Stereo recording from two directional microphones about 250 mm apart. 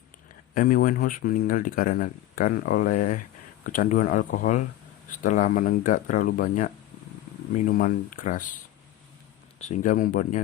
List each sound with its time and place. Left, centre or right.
0.5 s speech: left
9.6 s speech: left